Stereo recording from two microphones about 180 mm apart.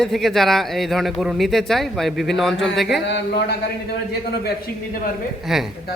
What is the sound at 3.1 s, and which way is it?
Speech, 70° left (ahead or behind).